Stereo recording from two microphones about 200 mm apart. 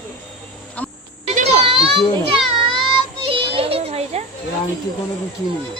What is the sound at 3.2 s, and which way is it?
Children playing, 25° right (ahead or behind).